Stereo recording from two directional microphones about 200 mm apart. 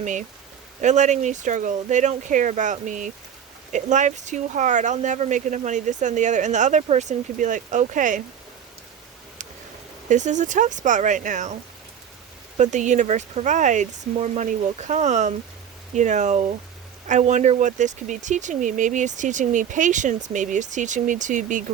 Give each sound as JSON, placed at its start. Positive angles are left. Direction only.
{"t": 0.0, "sound": "speech", "side_deg": -40}
{"t": 10.1, "sound": "speech", "side_deg": -35}
{"t": 12.5, "sound": "speech", "side_deg": -35}